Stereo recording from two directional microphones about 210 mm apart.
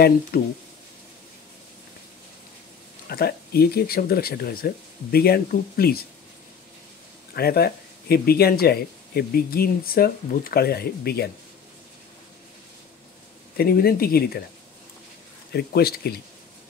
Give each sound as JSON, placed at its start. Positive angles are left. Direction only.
{"t": 0.3, "sound": "speech", "side_deg": 45}
{"t": 3.1, "sound": "speech", "side_deg": 45}
{"t": 7.3, "sound": "speech", "side_deg": 50}
{"t": 13.6, "sound": "speech", "side_deg": 45}
{"t": 15.5, "sound": "speech", "side_deg": 50}